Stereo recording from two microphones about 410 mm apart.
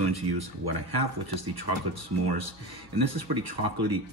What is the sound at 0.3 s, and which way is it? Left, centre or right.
Speech, right.